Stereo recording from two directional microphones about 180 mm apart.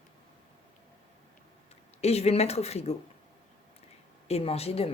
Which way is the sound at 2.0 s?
35° left (ahead or behind).